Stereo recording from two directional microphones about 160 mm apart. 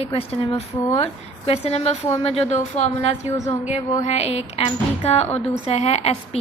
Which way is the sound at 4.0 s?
40° left (ahead or behind).